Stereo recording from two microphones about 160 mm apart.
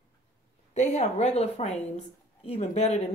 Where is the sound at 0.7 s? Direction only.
45° left (ahead or behind).